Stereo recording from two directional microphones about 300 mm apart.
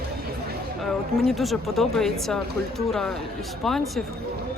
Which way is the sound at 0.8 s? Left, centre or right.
Centre.